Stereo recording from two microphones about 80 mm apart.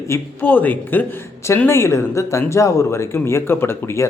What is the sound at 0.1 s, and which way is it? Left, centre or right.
Speech, left.